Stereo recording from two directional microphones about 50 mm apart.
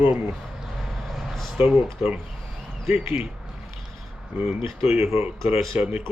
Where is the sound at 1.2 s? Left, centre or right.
Centre.